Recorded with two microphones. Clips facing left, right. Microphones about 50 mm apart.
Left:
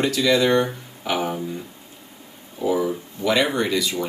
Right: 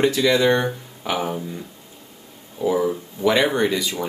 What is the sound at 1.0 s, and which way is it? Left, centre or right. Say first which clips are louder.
Music: even; centre.